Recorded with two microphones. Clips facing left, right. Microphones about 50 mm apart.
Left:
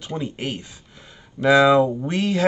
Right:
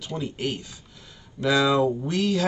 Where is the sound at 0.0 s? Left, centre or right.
Left.